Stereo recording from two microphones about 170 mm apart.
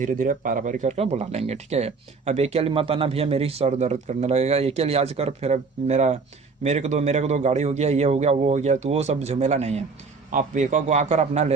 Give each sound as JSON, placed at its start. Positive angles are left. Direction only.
{"t": 0.0, "sound": "a man's voice", "side_deg": -50}